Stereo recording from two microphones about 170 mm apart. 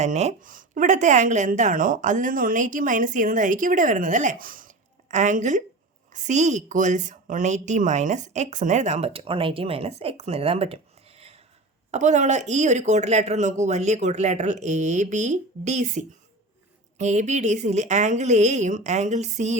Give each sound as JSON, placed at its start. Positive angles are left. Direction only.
{"t": 0.0, "sound": "a woman's voice", "side_deg": -40}
{"t": 11.9, "sound": "a woman's voice", "side_deg": -45}